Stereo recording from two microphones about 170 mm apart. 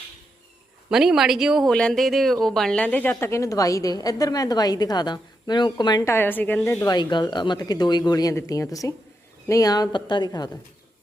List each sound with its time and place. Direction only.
0.9 s speech: 5° right (ahead or behind)
6.8 s a woman's voice: 25° left (ahead or behind)